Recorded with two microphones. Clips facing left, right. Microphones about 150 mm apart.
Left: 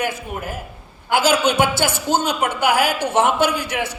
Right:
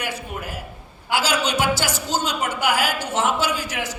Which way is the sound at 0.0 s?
50° left (ahead or behind).